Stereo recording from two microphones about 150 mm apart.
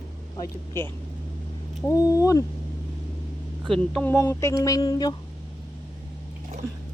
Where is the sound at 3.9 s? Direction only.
15° left (ahead or behind).